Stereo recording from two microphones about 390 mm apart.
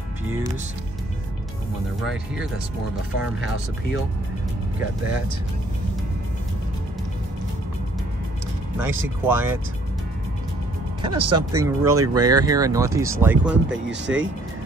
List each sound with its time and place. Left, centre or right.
8.7 s speech: centre
11.0 s speech: centre
11.2 s speech: right
11.6 s speech: centre
13.8 s speech: right